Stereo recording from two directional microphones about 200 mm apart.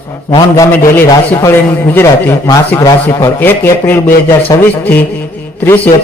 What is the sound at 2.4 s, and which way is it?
A man's voice, 15° left (ahead or behind).